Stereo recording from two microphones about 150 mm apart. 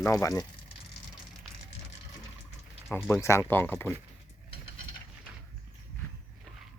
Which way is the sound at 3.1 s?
20° left (ahead or behind).